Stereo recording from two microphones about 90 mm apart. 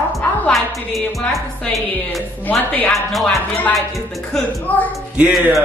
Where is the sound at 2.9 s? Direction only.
Centre (ahead or behind).